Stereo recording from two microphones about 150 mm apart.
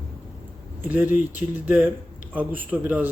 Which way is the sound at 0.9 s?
10° right (ahead or behind).